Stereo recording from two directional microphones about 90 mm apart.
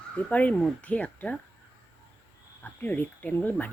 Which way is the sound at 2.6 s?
20° left (ahead or behind).